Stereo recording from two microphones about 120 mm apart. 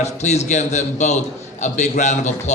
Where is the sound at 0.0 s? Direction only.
70° left (ahead or behind).